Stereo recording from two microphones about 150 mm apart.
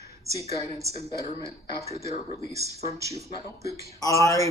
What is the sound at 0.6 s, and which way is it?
A woman's voice, 20° right (ahead or behind).